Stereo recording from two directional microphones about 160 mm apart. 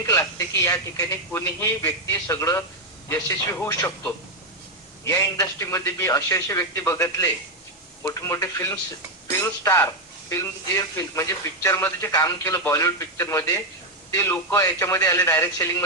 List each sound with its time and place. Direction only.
0.0 s a man's voice: 20° left (ahead or behind)